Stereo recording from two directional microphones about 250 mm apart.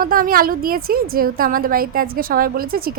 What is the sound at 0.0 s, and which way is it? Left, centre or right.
A woman's voice, right.